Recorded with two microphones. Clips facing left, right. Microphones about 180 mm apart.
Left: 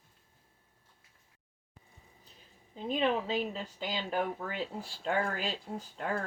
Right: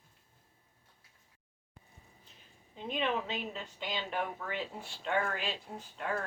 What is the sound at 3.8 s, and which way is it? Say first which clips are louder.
Speech: left 3 dB; 35° left (ahead or behind).